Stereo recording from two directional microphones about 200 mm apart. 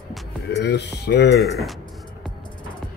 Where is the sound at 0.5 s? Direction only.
60° left (ahead or behind).